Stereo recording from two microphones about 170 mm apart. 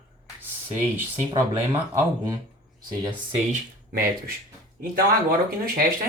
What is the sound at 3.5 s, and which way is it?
Speech, 60° right (ahead or behind).